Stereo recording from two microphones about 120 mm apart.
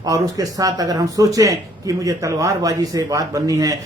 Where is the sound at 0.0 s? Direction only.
30° right (ahead or behind).